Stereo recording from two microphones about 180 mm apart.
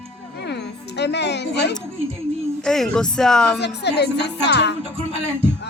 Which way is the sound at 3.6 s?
65° left (ahead or behind).